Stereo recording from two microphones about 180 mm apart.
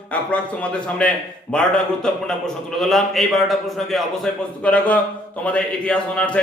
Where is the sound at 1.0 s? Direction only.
5° left (ahead or behind).